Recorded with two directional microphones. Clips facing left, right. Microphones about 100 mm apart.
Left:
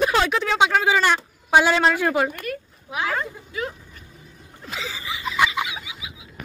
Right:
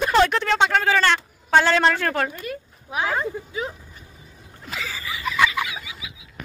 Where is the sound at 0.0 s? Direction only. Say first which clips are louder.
Right 2 dB; 5° left (ahead or behind).